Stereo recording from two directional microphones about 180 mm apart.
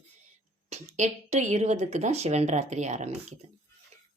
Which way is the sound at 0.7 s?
40° right (ahead or behind).